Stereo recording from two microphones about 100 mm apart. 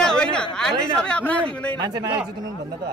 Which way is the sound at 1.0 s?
10° left (ahead or behind).